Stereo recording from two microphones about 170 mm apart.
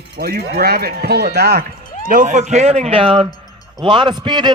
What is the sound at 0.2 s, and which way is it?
Speech, 65° right (ahead or behind).